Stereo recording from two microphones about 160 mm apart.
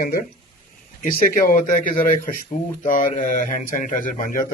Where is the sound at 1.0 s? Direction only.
60° left (ahead or behind).